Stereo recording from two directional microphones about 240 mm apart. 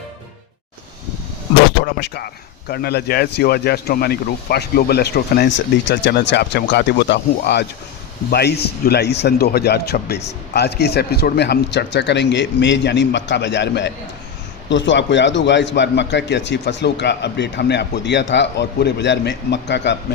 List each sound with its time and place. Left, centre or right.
1.8 s a man's voice: left